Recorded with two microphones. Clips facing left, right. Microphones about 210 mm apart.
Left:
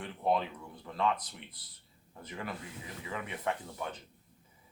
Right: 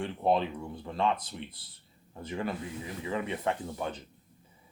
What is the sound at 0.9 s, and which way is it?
Speech, 30° right (ahead or behind).